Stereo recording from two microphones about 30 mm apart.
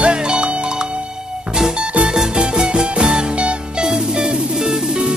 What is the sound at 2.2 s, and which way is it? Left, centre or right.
Music, right.